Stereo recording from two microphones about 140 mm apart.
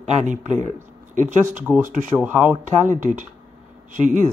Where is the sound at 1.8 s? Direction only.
80° right.